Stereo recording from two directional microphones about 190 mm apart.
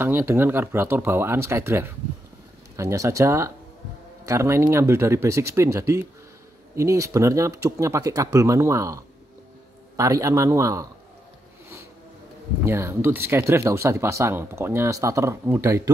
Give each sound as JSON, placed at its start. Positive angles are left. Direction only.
{"t": 0.0, "sound": "speech", "side_deg": -10}
{"t": 12.6, "sound": "speech", "side_deg": -15}